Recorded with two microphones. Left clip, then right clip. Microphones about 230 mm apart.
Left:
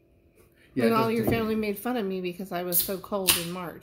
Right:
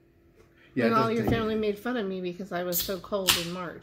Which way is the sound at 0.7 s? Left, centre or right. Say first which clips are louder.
Even; centre.